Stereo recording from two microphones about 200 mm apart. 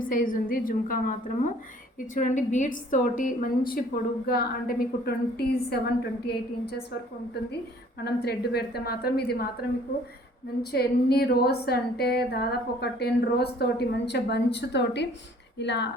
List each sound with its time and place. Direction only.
0.0 s a woman's voice: 40° left (ahead or behind)
2.1 s a woman's voice: 40° left (ahead or behind); by 6.8 s 55° left (ahead or behind)
8.0 s a woman's voice: 55° left (ahead or behind)
10.6 s a woman's voice: 50° left (ahead or behind)